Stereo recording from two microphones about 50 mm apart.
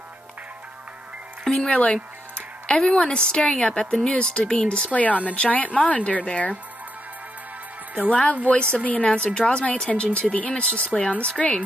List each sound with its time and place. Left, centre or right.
1.4 s music: centre
1.7 s speech: left
2.3 s music: centre
3.0 s speech: centre
8.1 s speech: left